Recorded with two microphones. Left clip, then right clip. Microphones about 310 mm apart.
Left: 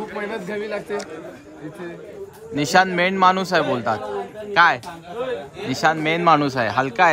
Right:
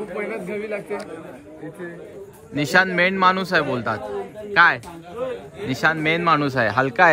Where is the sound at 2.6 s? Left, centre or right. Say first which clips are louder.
Left 1 dB; centre.